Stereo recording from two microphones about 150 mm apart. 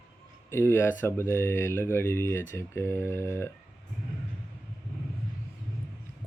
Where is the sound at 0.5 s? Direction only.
15° left (ahead or behind).